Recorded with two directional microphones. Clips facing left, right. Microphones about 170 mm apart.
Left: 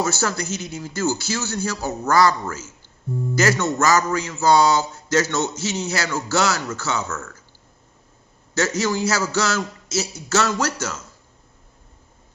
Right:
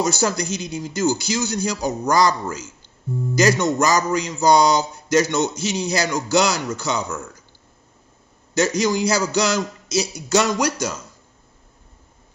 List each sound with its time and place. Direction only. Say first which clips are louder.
0.0 s speech: right 2 dB; 15° right (ahead or behind)
8.5 s speech: right 3 dB; 15° right (ahead or behind)